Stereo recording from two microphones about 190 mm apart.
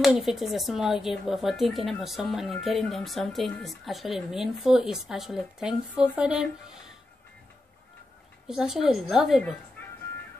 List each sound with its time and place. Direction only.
0.0 s speech: centre (ahead or behind)
8.5 s speech: 5° right (ahead or behind)